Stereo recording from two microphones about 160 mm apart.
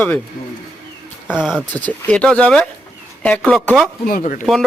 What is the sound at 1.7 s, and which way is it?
Speech, 10° left (ahead or behind).